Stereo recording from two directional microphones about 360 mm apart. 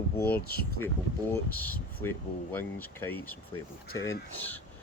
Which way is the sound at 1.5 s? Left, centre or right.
Centre.